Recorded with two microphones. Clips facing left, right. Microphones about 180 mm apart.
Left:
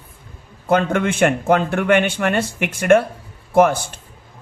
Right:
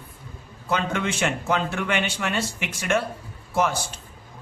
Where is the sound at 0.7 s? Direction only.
55° left (ahead or behind).